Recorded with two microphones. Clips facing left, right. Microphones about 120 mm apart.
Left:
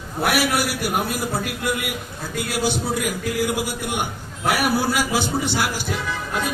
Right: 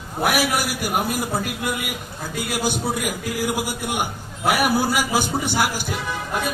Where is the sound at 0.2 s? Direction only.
10° right (ahead or behind).